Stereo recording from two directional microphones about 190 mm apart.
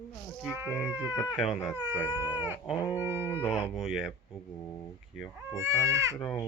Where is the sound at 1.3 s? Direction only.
Centre (ahead or behind).